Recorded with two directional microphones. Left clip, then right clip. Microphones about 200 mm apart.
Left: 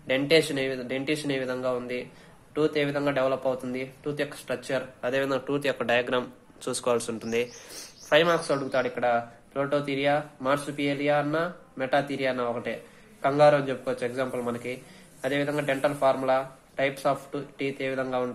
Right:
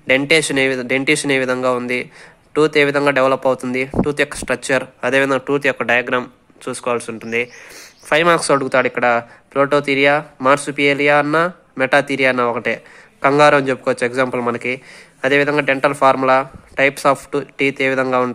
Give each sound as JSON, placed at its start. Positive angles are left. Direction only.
{"t": 0.0, "sound": "speech", "side_deg": -35}
{"t": 8.1, "sound": "speech", "side_deg": -35}
{"t": 8.4, "sound": "speech", "side_deg": -45}